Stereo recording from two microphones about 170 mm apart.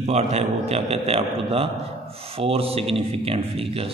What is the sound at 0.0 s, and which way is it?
A man's voice, 40° right (ahead or behind).